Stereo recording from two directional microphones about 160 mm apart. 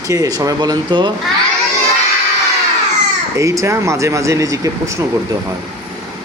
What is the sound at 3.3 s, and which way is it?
Speech, 20° right (ahead or behind).